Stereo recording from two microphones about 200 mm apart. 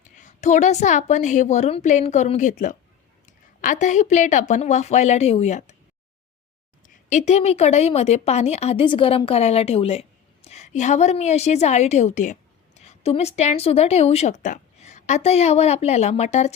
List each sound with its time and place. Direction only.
0.2 s a woman's voice: 35° left (ahead or behind)
6.8 s a woman's voice: 35° left (ahead or behind)